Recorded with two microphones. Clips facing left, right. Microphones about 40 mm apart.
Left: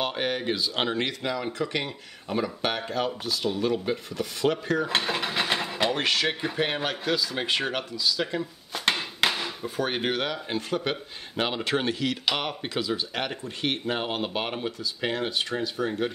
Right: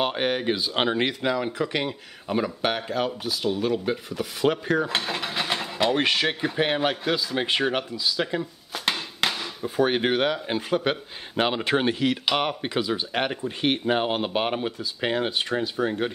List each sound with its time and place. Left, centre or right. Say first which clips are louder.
0.0 s speech: right 3 dB; centre
4.8 s mechanisms: left 1 dB; centre
5.9 s speech: right 3 dB; centre
8.7 s a sound: left 1 dB; centre
9.8 s speech: right 6 dB; centre